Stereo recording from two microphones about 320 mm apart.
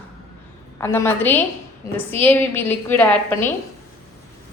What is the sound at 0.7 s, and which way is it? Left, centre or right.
A woman's voice, centre.